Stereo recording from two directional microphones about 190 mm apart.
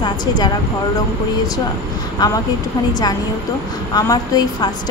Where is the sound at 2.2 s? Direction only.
20° left (ahead or behind).